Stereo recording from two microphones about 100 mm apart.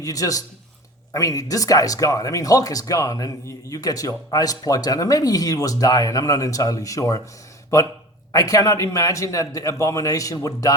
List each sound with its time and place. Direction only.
0.0 s speech: 35° left (ahead or behind)